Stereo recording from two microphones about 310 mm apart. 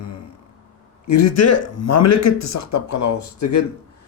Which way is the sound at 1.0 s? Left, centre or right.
Left.